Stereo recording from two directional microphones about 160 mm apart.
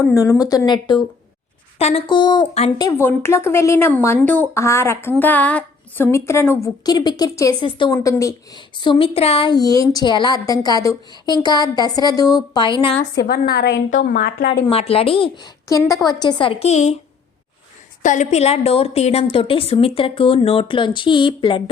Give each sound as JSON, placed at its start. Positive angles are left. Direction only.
{"t": 0.1, "sound": "a woman's voice", "side_deg": 20}
{"t": 1.8, "sound": "a woman's voice", "side_deg": 40}
{"t": 3.0, "sound": "a woman's voice", "side_deg": 15}
{"t": 13.1, "sound": "a woman's voice", "side_deg": 75}
{"t": 13.9, "sound": "a woman's voice", "side_deg": 65}
{"t": 14.5, "sound": "a woman's voice", "side_deg": 40}
{"t": 18.0, "sound": "a woman's voice", "side_deg": 50}